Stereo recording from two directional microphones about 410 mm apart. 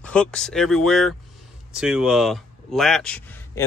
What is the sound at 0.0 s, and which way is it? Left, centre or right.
Speech, centre.